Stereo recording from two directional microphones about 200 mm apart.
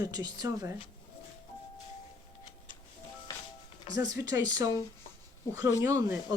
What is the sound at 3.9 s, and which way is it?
A woman's voice, 20° right (ahead or behind).